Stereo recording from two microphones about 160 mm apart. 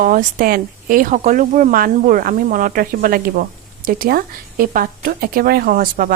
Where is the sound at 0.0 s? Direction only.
55° right (ahead or behind).